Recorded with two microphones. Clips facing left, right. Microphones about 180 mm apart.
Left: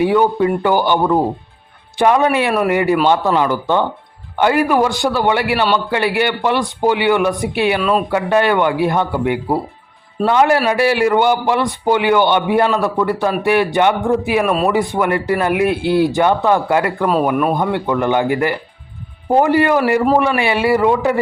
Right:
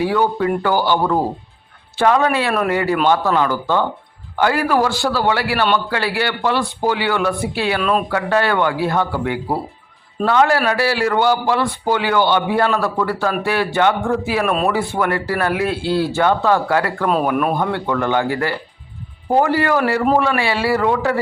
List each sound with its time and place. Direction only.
0.0 s a man's voice: 20° left (ahead or behind)
7.8 s speech: centre (ahead or behind)
8.1 s a man's voice: 20° left (ahead or behind)
14.4 s speech: 5° left (ahead or behind)
14.7 s speech: 15° left (ahead or behind)
17.1 s speech: centre (ahead or behind)
17.5 s a man's voice: 15° left (ahead or behind)